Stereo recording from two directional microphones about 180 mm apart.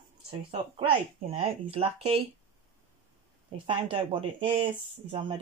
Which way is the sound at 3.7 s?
30° right (ahead or behind).